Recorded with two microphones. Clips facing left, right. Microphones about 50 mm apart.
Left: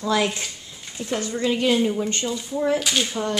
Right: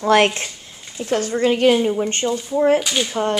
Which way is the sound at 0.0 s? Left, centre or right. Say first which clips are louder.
Right 7 dB; right.